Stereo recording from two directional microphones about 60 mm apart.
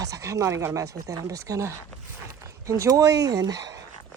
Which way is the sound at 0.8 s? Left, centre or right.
Right.